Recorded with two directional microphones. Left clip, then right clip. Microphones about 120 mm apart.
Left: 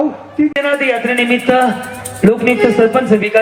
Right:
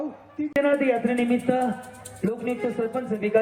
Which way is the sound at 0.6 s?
20° left (ahead or behind).